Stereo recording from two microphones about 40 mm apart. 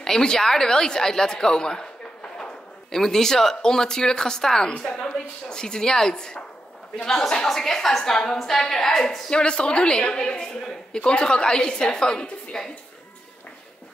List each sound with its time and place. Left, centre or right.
0.0 s a woman's voice: centre
9.3 s a woman's voice: left